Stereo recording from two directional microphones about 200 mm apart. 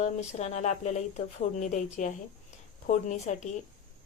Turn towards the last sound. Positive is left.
turn(degrees=40)  # may be behind; listen again after turning